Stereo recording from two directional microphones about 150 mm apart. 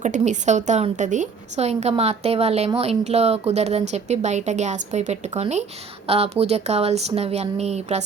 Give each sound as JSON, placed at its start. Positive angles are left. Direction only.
{"t": 0.0, "sound": "a woman's voice", "side_deg": -55}